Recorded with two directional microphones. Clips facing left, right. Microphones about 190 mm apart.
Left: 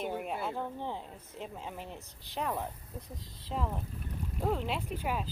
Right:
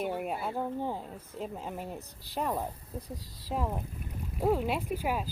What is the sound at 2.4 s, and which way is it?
Speech, 10° right (ahead or behind).